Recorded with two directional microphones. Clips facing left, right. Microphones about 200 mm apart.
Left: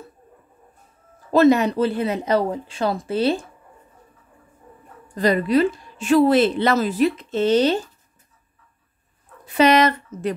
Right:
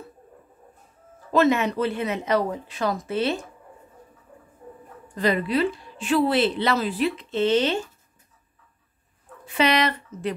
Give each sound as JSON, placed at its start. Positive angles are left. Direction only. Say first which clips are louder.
{"t": 1.3, "sound": "speech", "louder": "left 5 dB", "side_deg": 35}
{"t": 5.1, "sound": "a woman's voice", "louder": "left 5 dB", "side_deg": 40}
{"t": 9.5, "sound": "a woman's voice", "louder": "left 6 dB", "side_deg": 45}